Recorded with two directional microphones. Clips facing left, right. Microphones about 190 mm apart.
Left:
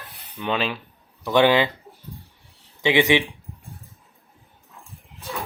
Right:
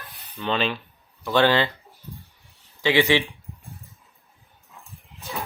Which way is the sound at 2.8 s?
20° left (ahead or behind).